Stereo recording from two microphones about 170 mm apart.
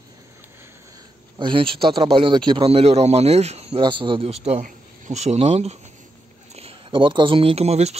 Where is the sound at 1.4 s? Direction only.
30° right (ahead or behind).